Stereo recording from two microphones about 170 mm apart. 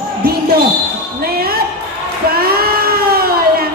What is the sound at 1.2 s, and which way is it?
Speech, 65° right (ahead or behind).